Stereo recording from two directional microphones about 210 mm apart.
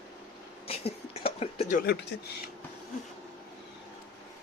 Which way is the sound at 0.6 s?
30° left (ahead or behind).